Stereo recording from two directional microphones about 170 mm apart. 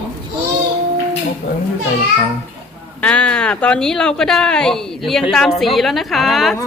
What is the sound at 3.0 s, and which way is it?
Speech, 5° left (ahead or behind).